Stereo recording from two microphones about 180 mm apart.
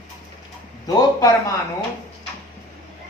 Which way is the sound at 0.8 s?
20° left (ahead or behind).